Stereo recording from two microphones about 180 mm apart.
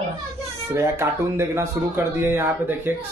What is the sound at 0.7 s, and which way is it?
Speech, 15° right (ahead or behind).